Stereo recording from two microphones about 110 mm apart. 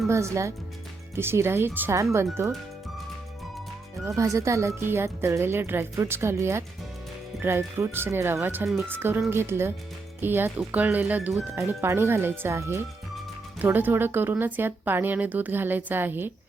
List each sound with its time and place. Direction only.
0.1 s speech: 25° right (ahead or behind)
4.0 s speech: 30° right (ahead or behind)